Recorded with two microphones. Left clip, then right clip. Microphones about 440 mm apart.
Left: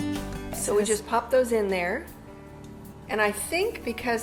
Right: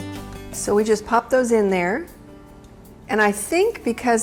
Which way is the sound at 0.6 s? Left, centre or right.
Right.